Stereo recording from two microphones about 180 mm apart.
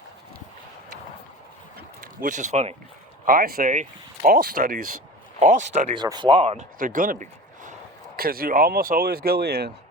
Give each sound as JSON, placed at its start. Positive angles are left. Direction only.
{"t": 2.0, "sound": "speech", "side_deg": -45}
{"t": 3.2, "sound": "speech", "side_deg": -55}
{"t": 5.9, "sound": "speech", "side_deg": -25}
{"t": 6.7, "sound": "speech", "side_deg": -50}